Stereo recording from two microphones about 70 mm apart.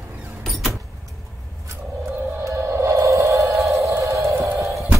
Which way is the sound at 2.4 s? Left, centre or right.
Right.